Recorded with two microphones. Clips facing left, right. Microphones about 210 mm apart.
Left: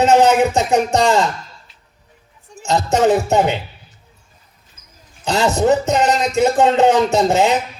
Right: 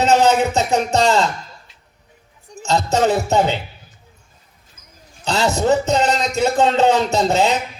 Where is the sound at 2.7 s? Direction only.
15° left (ahead or behind).